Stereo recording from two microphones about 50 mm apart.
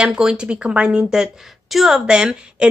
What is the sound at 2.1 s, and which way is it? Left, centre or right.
Speech, centre.